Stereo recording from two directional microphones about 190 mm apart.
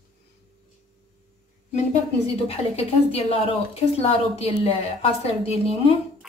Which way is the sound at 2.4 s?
30° left (ahead or behind).